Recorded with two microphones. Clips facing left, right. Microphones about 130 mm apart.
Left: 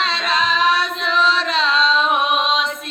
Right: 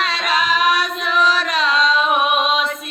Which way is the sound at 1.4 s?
25° left (ahead or behind).